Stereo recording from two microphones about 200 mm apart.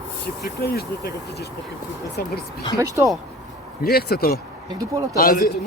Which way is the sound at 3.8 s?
50° left (ahead or behind).